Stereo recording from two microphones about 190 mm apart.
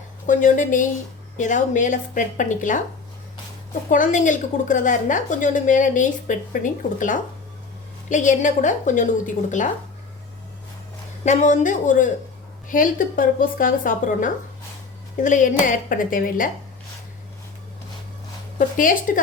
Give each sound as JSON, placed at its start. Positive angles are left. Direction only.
{"t": 0.3, "sound": "a woman's voice", "side_deg": 40}
{"t": 3.8, "sound": "a woman's voice", "side_deg": 45}
{"t": 11.3, "sound": "a woman's voice", "side_deg": 40}
{"t": 18.8, "sound": "a woman's voice", "side_deg": 45}